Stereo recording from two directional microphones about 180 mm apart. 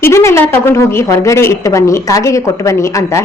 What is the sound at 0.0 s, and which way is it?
A woman's voice, 15° left (ahead or behind).